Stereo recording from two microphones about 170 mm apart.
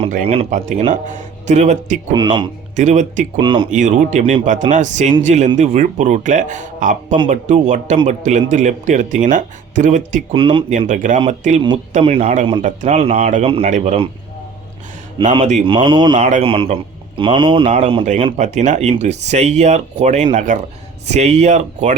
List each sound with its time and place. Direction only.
0.3 s speech: 40° right (ahead or behind)
2.1 s speech: 25° right (ahead or behind)
2.7 s speech: 45° right (ahead or behind)
3.3 s speech: 30° right (ahead or behind)
3.7 s speech: 45° right (ahead or behind)
10.3 s speech: 30° right (ahead or behind)
10.7 s speech: 45° right (ahead or behind)
15.2 s speech: 30° right (ahead or behind)
16.1 s speech: 45° right (ahead or behind)
16.4 s speech: 30° right (ahead or behind)